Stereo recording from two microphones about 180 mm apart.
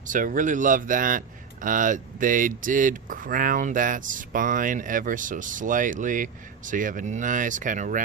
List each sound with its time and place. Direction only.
0.1 s speech: 45° right (ahead or behind)